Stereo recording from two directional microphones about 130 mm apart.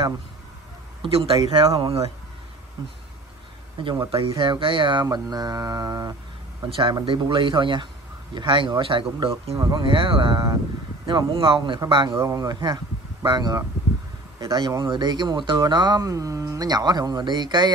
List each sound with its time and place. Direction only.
1.0 s speech: 45° right (ahead or behind)
3.8 s speech: 30° right (ahead or behind)